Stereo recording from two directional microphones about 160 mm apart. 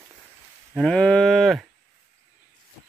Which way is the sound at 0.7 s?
5° left (ahead or behind).